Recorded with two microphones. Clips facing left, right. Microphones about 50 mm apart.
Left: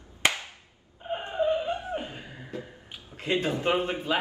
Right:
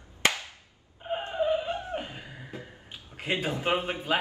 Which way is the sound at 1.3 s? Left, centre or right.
Centre.